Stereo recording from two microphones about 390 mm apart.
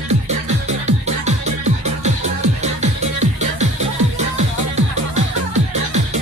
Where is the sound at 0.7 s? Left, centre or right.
Centre.